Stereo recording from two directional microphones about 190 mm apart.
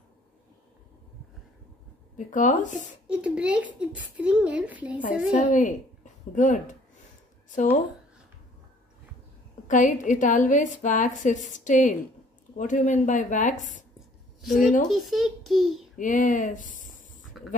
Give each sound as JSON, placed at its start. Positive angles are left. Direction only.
{"t": 2.1, "sound": "a woman's voice", "side_deg": 45}
{"t": 3.1, "sound": "speech", "side_deg": -5}
{"t": 5.3, "sound": "a woman's voice", "side_deg": 45}
{"t": 9.7, "sound": "a woman's voice", "side_deg": 40}
{"t": 14.4, "sound": "a child's voice", "side_deg": 0}
{"t": 16.0, "sound": "speech", "side_deg": 45}